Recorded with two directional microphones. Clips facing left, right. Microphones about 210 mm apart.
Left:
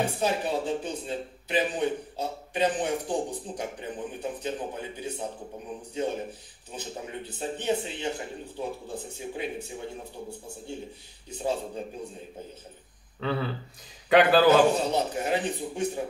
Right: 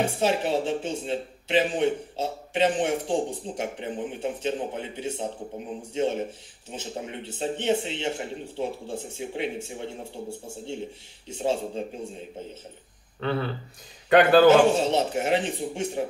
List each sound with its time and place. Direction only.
0.0 s speech: 25° right (ahead or behind)
13.2 s a man's voice: centre (ahead or behind)
14.7 s speech: 25° right (ahead or behind)